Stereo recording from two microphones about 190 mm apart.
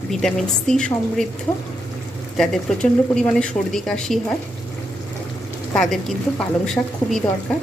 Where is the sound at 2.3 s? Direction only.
5° left (ahead or behind).